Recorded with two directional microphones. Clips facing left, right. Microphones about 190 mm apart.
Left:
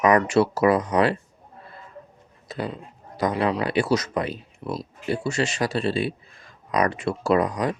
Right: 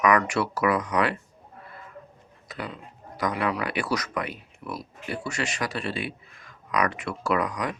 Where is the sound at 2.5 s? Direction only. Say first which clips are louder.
Left 6 dB; 30° left (ahead or behind).